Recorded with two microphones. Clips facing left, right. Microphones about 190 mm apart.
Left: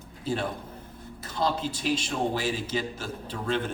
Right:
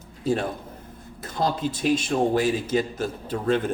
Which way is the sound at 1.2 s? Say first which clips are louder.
Right 3 dB; 50° right (ahead or behind).